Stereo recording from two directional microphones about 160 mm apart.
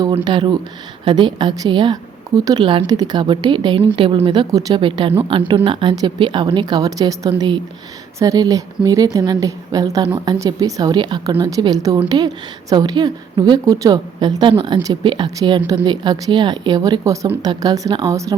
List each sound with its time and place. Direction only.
0.1 s a woman's voice: 30° right (ahead or behind)